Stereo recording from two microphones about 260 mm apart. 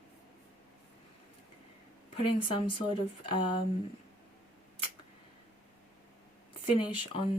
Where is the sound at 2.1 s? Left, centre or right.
Centre.